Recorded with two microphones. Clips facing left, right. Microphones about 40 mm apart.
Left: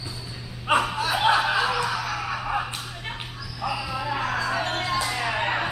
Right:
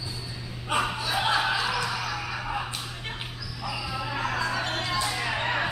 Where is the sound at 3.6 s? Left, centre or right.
Left.